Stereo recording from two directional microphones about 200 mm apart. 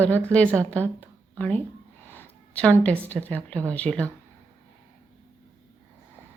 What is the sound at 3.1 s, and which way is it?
Speech, 10° left (ahead or behind).